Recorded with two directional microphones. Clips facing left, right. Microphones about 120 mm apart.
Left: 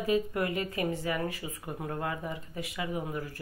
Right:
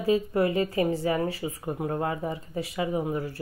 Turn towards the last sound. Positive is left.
turn(degrees=-30)  # may be behind; listen again after turning